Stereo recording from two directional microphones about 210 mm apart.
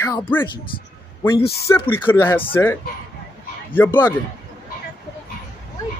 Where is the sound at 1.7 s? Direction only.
10° left (ahead or behind).